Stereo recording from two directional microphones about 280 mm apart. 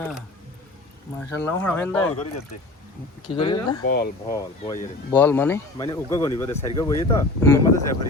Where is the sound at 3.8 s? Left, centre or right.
Left.